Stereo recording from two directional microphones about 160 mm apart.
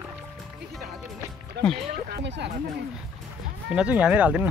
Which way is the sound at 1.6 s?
90° right.